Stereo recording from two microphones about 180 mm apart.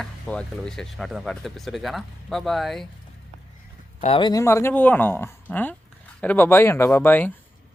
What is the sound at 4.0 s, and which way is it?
Speech, 30° left (ahead or behind).